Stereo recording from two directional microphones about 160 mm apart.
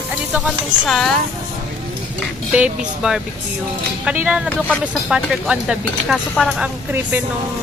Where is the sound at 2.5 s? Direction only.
5° right (ahead or behind).